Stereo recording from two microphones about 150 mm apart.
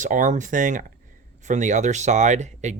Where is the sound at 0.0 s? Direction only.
55° right (ahead or behind).